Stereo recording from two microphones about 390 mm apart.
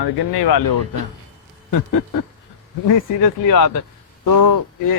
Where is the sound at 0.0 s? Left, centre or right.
Left.